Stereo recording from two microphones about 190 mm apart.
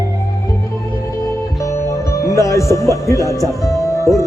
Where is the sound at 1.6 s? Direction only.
15° left (ahead or behind).